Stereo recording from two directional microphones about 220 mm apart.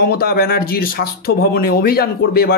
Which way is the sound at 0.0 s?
45° left (ahead or behind).